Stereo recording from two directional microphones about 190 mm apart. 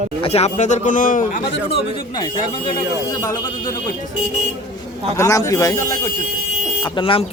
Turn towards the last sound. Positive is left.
turn(degrees=30)  # may be behind; listen again after turning